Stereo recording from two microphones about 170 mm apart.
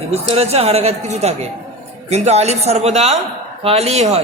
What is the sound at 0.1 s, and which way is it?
A man's voice, 35° right (ahead or behind).